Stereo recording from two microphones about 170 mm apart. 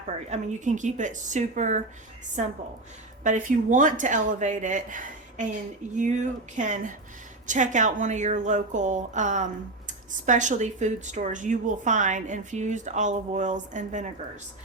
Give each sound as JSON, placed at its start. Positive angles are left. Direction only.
{"t": 0.3, "sound": "a woman's voice", "side_deg": -45}
{"t": 3.2, "sound": "a woman's voice", "side_deg": -50}